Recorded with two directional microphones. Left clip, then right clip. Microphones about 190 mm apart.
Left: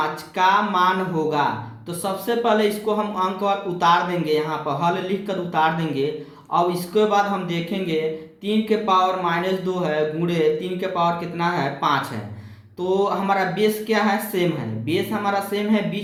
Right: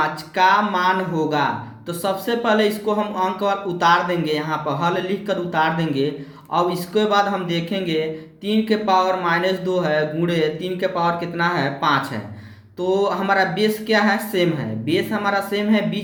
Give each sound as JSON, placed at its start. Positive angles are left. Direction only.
{"t": 0.0, "sound": "speech", "side_deg": -20}